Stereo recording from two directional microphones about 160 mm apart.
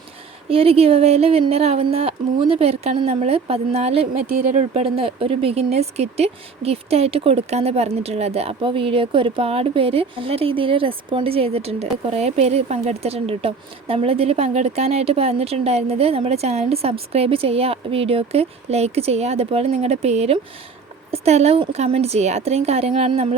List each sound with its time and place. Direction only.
0.4 s a woman's voice: 35° right (ahead or behind)